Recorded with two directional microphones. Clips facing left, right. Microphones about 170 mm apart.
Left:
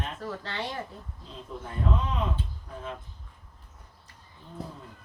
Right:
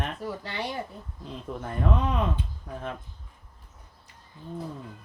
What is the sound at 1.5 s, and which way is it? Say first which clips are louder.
Speech: right 4 dB; 80° right.